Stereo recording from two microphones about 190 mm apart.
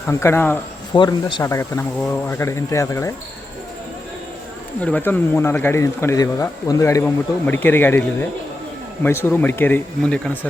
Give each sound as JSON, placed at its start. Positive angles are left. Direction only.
{"t": 0.1, "sound": "speech", "side_deg": 15}
{"t": 0.9, "sound": "speech", "side_deg": 20}
{"t": 4.8, "sound": "speech", "side_deg": 5}